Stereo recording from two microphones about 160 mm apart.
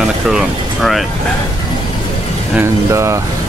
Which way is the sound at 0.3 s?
Centre (ahead or behind).